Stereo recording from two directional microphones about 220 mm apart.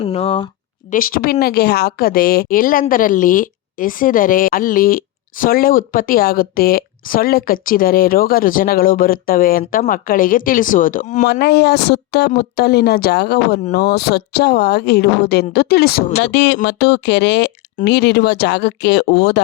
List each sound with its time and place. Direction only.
0.0 s speech: 25° left (ahead or behind)
0.9 s a woman's voice: 40° left (ahead or behind)
11.3 s a woman's voice: 50° left (ahead or behind)